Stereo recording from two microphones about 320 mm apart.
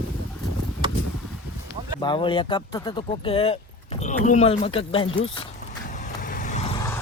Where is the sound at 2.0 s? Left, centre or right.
Centre.